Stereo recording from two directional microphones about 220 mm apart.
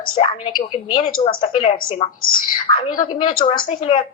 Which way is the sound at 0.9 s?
40° left (ahead or behind).